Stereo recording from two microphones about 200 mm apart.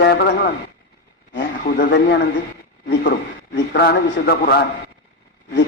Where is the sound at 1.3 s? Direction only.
55° left (ahead or behind).